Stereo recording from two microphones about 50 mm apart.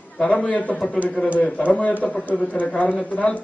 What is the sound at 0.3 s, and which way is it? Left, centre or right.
A man's voice, left.